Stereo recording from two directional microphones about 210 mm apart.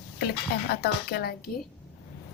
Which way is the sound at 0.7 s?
50° left (ahead or behind).